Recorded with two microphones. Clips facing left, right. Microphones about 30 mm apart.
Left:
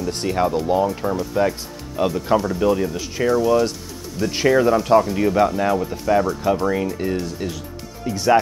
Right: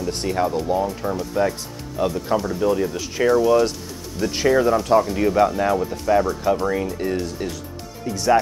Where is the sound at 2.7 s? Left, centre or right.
Centre.